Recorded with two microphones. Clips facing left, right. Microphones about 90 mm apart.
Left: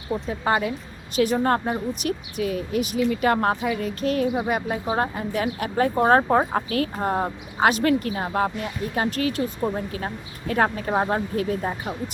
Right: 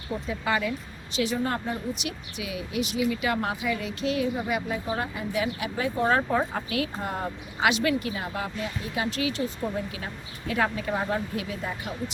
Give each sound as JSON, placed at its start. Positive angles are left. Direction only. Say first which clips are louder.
{"t": 0.3, "sound": "speech", "louder": "left 3 dB", "side_deg": 40}